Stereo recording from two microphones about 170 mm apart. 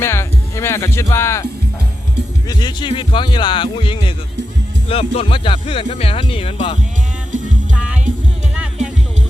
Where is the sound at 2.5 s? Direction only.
25° left (ahead or behind).